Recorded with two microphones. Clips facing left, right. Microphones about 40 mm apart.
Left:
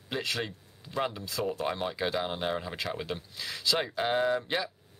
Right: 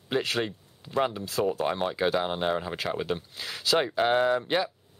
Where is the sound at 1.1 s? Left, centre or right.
Right.